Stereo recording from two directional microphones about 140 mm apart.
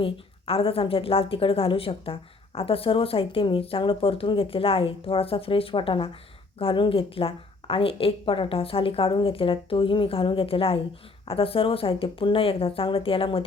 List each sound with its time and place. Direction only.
0.0 s a woman's voice: 40° left (ahead or behind)